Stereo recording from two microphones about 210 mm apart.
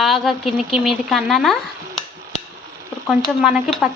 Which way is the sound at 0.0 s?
Centre (ahead or behind).